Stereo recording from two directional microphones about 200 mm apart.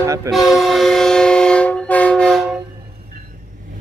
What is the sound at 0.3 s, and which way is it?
Train, centre (ahead or behind).